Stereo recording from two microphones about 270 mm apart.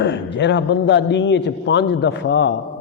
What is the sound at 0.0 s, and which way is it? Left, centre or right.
A man's voice, left.